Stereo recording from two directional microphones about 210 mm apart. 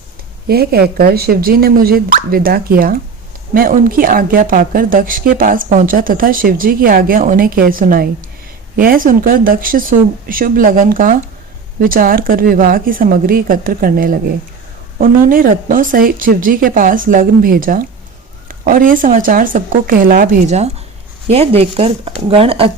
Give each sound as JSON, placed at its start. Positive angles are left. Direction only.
{"t": 0.4, "sound": "a woman's voice", "side_deg": -45}